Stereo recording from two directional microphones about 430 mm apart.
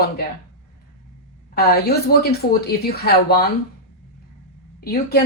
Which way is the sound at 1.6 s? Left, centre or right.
Left.